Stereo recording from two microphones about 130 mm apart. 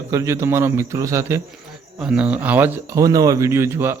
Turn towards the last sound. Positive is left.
turn(degrees=-20)  # may be behind; listen again after turning